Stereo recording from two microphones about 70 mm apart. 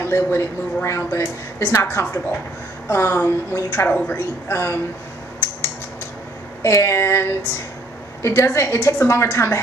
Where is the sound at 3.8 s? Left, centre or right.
Left.